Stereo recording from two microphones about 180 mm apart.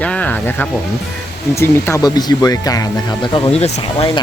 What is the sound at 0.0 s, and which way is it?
Snake, 5° left (ahead or behind).